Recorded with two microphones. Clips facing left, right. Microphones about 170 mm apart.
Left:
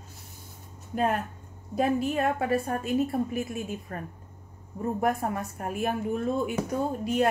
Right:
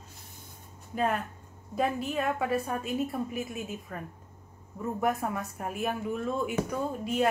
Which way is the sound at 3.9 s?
50° left (ahead or behind).